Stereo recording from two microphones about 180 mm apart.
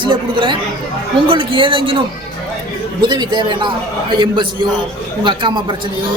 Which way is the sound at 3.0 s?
25° right (ahead or behind).